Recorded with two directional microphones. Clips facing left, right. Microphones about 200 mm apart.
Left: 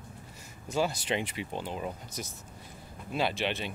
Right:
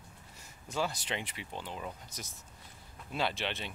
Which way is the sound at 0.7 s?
10° left (ahead or behind).